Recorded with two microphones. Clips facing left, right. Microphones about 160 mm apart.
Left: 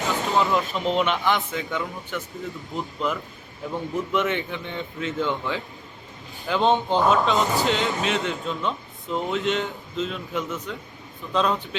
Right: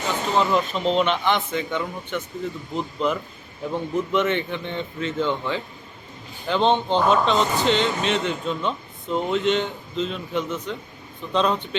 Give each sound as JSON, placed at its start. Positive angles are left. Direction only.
{"t": 0.0, "sound": "a sound", "side_deg": 0}
{"t": 0.7, "sound": "speech", "side_deg": -20}
{"t": 1.2, "sound": "speech", "side_deg": 0}
{"t": 6.7, "sound": "speech", "side_deg": 0}